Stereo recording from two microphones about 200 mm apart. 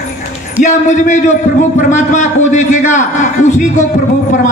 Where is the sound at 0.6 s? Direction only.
40° left (ahead or behind).